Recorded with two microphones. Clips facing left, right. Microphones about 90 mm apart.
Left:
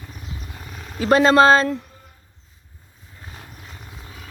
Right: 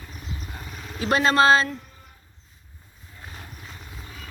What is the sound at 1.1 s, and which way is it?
Speech, 35° left (ahead or behind).